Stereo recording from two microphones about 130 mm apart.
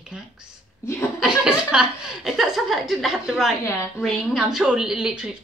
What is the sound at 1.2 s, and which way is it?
A woman's voice, 5° right (ahead or behind).